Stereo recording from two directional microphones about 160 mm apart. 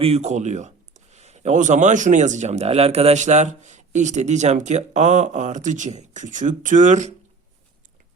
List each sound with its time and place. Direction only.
0.0 s speech: 40° right (ahead or behind)